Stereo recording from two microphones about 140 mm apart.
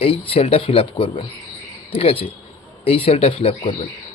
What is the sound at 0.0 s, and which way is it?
Speech, 45° left (ahead or behind).